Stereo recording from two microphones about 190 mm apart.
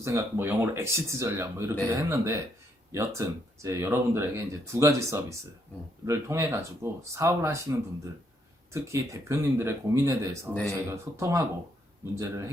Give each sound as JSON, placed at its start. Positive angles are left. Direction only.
{"t": 0.0, "sound": "speech", "side_deg": -15}
{"t": 10.5, "sound": "speech", "side_deg": 5}
{"t": 10.8, "sound": "speech", "side_deg": -15}